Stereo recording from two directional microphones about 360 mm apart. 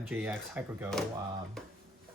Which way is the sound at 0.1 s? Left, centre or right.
Centre.